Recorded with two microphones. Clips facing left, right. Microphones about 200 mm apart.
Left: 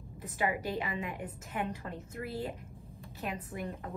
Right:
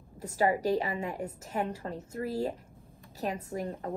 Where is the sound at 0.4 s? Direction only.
40° right (ahead or behind).